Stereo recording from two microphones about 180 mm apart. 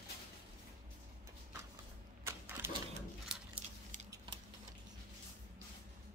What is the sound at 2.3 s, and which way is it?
Typewriter, 10° right (ahead or behind).